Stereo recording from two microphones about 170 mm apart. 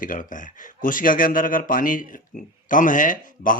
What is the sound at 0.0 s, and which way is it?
A man's voice, 50° left (ahead or behind).